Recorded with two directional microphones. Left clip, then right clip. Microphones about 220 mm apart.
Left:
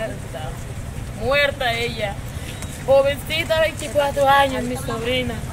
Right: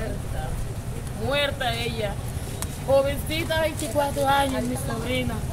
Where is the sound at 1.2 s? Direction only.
15° left (ahead or behind).